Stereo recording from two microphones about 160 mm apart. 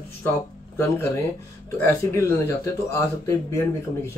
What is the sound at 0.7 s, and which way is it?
Speech, 15° left (ahead or behind).